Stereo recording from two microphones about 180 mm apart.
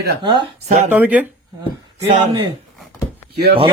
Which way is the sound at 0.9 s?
10° right (ahead or behind).